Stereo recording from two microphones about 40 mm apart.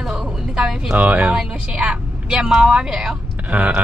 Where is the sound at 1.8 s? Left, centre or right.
Right.